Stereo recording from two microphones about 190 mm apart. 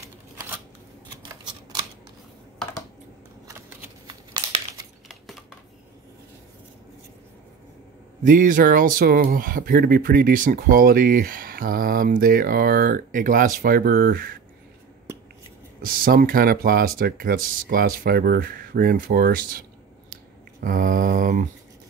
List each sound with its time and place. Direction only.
3.4 s shuffling cards: 15° right (ahead or behind)
8.2 s speech: 45° right (ahead or behind)
15.8 s speech: 50° right (ahead or behind)
20.6 s speech: 45° right (ahead or behind)